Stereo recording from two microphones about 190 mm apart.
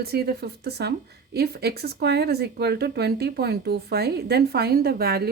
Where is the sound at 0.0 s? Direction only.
55° right (ahead or behind).